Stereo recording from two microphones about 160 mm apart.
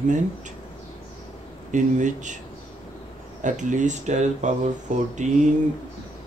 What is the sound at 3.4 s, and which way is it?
Speech, 50° right (ahead or behind).